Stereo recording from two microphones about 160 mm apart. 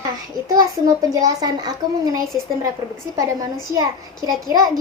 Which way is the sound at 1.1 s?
25° right (ahead or behind).